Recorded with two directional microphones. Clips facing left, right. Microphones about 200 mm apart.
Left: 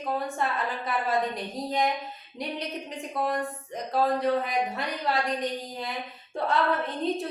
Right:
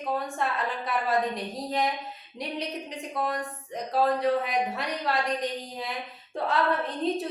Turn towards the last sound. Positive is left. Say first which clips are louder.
# even
turn(degrees=0)  # may be behind; listen again after turning